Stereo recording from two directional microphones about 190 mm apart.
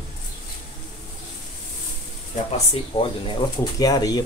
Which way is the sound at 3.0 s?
25° left (ahead or behind).